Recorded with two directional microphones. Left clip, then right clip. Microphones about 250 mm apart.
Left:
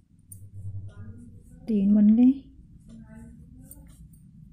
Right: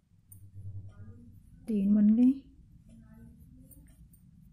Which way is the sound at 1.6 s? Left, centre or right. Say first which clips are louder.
Left 5 dB; centre.